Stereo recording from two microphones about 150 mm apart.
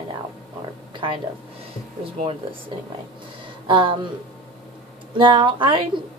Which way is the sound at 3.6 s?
35° right (ahead or behind).